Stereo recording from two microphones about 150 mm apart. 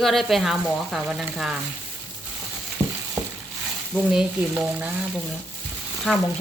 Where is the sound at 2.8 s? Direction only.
20° right (ahead or behind).